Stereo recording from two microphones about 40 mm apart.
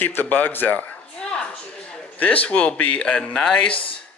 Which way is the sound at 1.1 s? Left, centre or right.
Left.